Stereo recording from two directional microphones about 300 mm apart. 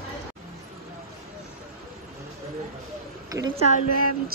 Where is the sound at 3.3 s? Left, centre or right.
Centre.